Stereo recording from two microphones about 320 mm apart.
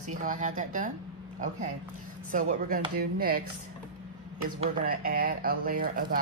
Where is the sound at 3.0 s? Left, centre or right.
Right.